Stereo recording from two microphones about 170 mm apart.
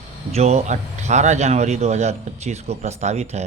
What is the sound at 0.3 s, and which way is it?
A man's voice, 40° right (ahead or behind).